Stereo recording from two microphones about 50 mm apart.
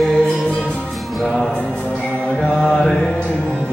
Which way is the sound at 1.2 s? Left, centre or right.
Centre.